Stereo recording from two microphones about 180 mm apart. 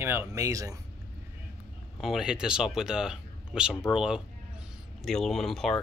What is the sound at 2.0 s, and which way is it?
Speech, centre (ahead or behind).